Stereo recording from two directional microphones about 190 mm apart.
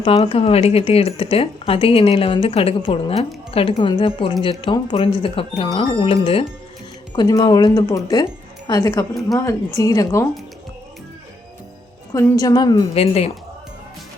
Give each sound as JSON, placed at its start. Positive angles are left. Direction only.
{"t": 0.0, "sound": "a woman's voice", "side_deg": 30}
{"t": 12.1, "sound": "speech", "side_deg": 20}